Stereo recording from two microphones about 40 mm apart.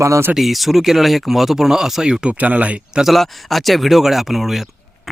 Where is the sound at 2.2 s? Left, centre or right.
Right.